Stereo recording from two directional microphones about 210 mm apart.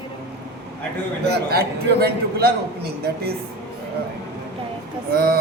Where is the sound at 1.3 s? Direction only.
50° right (ahead or behind).